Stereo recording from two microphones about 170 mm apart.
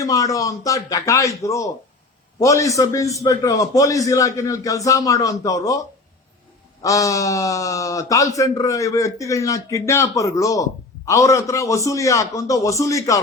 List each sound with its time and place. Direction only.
0.0 s speech: 20° left (ahead or behind)
6.8 s speech: 20° left (ahead or behind)